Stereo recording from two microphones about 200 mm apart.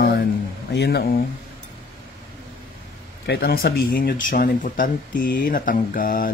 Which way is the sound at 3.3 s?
50° left (ahead or behind).